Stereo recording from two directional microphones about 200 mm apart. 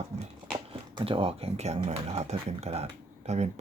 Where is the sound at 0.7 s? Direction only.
25° right (ahead or behind).